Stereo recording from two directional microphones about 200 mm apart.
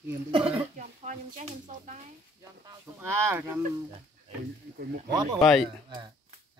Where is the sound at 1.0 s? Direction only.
35° right (ahead or behind).